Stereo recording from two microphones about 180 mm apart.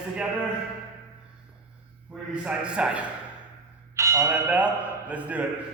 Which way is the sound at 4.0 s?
15° right (ahead or behind).